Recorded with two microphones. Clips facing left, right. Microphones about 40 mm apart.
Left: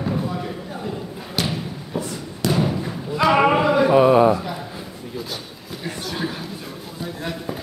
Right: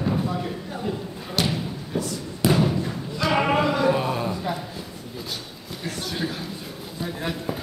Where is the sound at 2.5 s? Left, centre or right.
Centre; by 4.3 s left.